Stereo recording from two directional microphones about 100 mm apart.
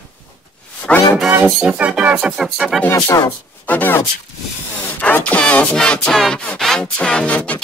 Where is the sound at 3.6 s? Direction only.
20° left (ahead or behind).